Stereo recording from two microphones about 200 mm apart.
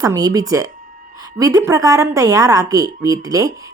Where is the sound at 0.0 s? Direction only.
20° right (ahead or behind).